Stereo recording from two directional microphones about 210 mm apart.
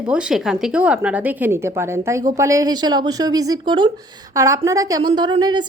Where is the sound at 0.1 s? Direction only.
5° right (ahead or behind).